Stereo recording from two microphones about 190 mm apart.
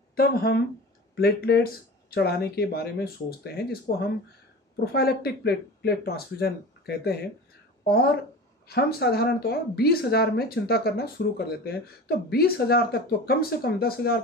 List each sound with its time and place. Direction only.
0.1 s a woman's voice: 55° left (ahead or behind)